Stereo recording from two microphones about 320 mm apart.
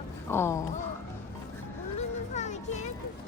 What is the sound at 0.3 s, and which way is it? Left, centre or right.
Speech, centre.